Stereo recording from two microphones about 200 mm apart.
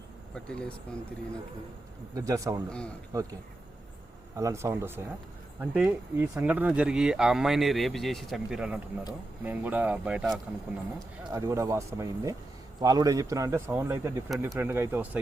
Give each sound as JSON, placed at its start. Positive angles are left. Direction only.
{"t": 0.3, "sound": "speech", "side_deg": 5}
{"t": 2.1, "sound": "speech", "side_deg": -15}
{"t": 2.6, "sound": "speech", "side_deg": 5}
{"t": 3.1, "sound": "speech", "side_deg": -15}
{"t": 4.4, "sound": "speech", "side_deg": -15}
{"t": 11.3, "sound": "speech", "side_deg": -15}